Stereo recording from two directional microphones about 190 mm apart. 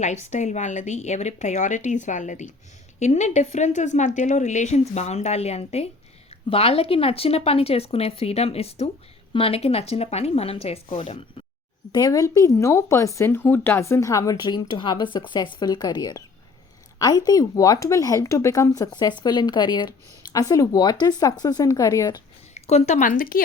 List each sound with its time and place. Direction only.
0.0 s a woman's voice: 40° left (ahead or behind); by 22.2 s 20° left (ahead or behind)
22.5 s speech: 35° left (ahead or behind)